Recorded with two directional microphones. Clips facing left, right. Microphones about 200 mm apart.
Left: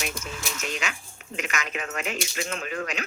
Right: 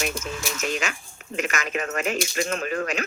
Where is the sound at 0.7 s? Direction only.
45° right (ahead or behind).